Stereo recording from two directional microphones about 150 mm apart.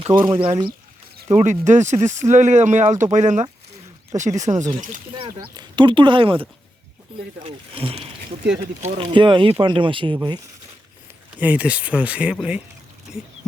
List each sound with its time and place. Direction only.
0.1 s speech: 35° right (ahead or behind)
1.3 s speech: 50° right (ahead or behind)
5.1 s speech: 30° right (ahead or behind)
11.3 s speech: 10° right (ahead or behind)